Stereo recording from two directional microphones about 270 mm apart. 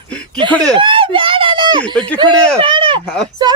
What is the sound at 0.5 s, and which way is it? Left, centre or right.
Speech, centre.